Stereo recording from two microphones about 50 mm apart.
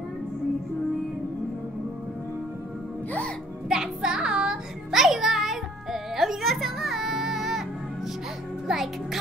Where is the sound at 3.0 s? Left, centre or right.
Left.